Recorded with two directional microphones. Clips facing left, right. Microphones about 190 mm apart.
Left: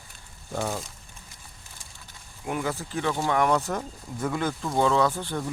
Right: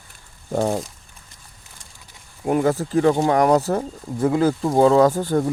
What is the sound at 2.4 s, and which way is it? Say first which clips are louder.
Speech: right 10 dB; 40° right (ahead or behind).